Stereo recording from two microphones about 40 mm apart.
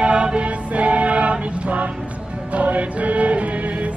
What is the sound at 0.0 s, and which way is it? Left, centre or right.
Music, right.